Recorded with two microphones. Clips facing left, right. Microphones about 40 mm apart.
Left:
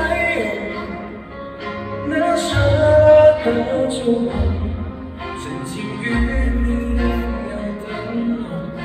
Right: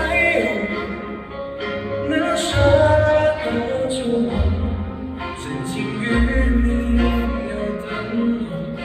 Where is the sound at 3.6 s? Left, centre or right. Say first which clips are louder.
Left 3 dB; centre.